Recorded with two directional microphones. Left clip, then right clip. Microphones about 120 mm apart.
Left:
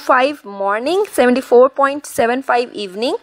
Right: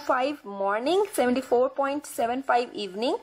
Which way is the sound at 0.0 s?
25° left (ahead or behind).